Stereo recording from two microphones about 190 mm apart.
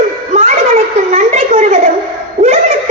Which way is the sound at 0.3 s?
35° right (ahead or behind).